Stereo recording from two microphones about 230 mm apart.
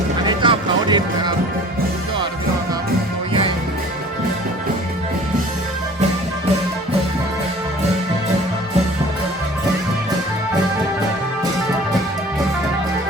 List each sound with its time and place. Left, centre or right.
0.3 s music: centre